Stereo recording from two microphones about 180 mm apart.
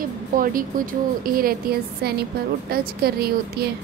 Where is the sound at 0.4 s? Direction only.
50° right (ahead or behind).